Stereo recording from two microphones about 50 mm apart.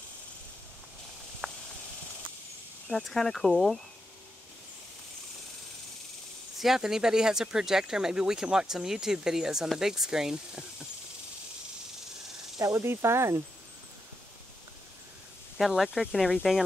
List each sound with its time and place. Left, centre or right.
1.4 s a sound: centre
2.9 s speech: centre
6.6 s speech: centre
12.6 s speech: right
15.5 s speech: centre